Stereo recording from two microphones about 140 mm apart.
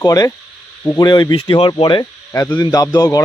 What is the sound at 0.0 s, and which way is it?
A man's voice, 25° left (ahead or behind).